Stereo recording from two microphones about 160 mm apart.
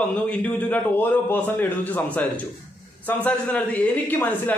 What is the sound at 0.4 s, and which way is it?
A man's voice, 10° left (ahead or behind).